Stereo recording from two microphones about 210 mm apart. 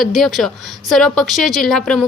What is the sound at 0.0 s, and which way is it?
Speech, centre (ahead or behind).